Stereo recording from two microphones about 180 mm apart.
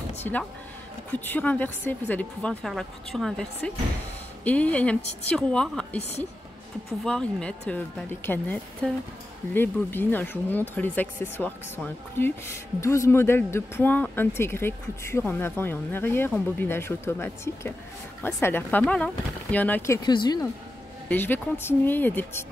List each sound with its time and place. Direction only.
0.2 s a woman's voice: 10° left (ahead or behind)
7.1 s speech: 5° left (ahead or behind)
20.0 s speech: 25° left (ahead or behind)
21.1 s speech: 10° left (ahead or behind)